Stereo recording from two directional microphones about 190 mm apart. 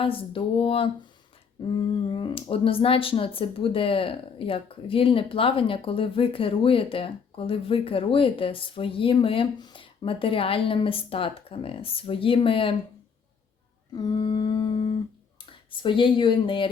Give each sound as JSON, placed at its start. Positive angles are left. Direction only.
{"t": 0.0, "sound": "speech", "side_deg": 30}
{"t": 13.9, "sound": "speech", "side_deg": 20}